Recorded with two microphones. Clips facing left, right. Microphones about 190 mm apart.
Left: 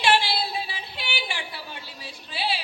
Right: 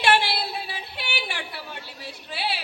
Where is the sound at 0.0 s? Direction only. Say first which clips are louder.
Even; 65° right (ahead or behind).